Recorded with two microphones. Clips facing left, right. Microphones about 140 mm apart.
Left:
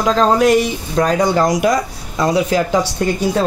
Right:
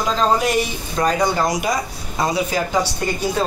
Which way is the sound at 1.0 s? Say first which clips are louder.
Left 4 dB; 90° left.